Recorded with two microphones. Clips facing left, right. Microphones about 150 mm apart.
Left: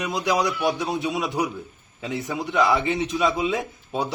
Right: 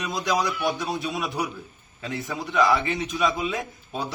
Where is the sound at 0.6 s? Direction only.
25° left (ahead or behind).